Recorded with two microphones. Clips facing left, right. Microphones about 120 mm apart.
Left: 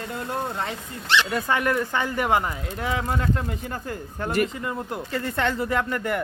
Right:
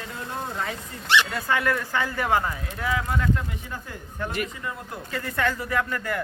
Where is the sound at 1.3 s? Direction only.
20° left (ahead or behind); by 4.5 s 40° left (ahead or behind).